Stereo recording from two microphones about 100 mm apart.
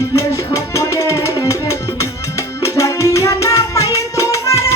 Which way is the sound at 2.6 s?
30° left (ahead or behind).